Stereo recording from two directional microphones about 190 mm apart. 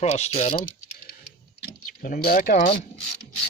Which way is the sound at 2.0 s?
50° left (ahead or behind).